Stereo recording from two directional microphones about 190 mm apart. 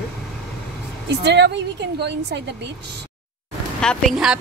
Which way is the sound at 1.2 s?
65° right (ahead or behind).